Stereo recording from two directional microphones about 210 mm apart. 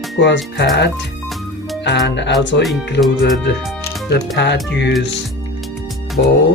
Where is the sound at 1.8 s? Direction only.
55° left (ahead or behind).